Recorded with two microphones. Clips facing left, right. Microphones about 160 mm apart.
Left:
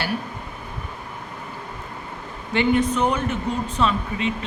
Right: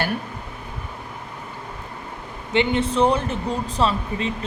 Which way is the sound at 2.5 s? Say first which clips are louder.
Left 1 dB; 20° right (ahead or behind).